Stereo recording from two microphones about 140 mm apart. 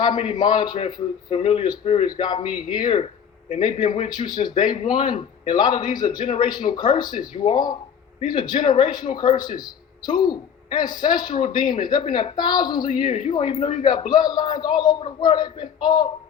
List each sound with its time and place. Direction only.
0.0 s a woman's voice: 30° left (ahead or behind)
2.0 s a woman's voice: 35° left (ahead or behind)